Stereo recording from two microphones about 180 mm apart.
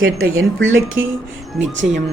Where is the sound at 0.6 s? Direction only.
90° right.